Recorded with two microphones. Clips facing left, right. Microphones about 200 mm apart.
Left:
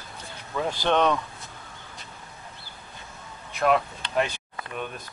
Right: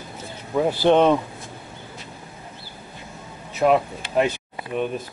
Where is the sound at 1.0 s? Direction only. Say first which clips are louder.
Right 3 dB; 25° right (ahead or behind).